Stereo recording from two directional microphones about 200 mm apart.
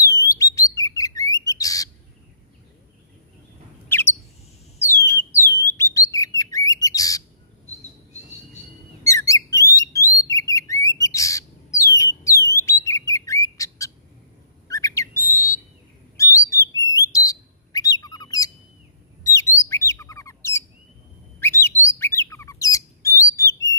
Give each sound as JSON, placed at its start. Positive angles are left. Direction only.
{"t": 0.0, "sound": "bird", "side_deg": 15}
{"t": 3.9, "sound": "bird", "side_deg": 10}
{"t": 9.0, "sound": "bird", "side_deg": 15}